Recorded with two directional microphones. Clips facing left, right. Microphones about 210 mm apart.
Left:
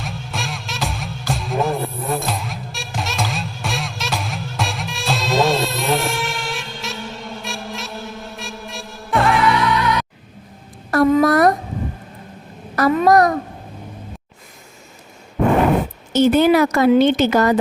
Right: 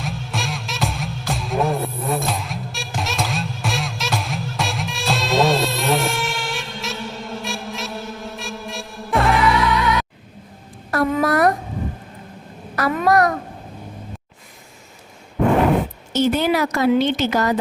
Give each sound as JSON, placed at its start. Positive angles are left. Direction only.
{"t": 0.0, "sound": "music", "side_deg": 0}
{"t": 10.9, "sound": "a sound", "side_deg": 40}
{"t": 13.0, "sound": "babbling", "side_deg": 35}
{"t": 16.1, "sound": "a woman's voice", "side_deg": 50}